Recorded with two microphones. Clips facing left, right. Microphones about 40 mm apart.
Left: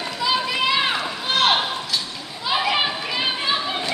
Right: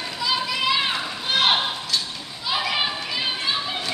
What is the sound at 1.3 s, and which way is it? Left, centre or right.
Clip-clop, centre.